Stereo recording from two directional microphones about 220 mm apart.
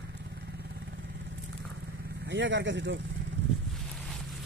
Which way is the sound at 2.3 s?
55° right (ahead or behind).